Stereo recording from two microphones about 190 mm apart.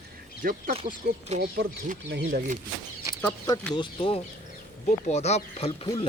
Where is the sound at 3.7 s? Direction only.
25° left (ahead or behind).